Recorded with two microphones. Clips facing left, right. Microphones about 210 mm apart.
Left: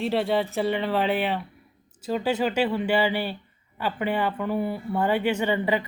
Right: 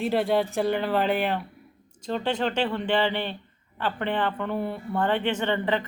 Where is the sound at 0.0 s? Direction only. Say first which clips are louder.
Right 1 dB; centre (ahead or behind).